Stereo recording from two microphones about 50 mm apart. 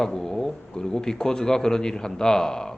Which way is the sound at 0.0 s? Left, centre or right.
Centre.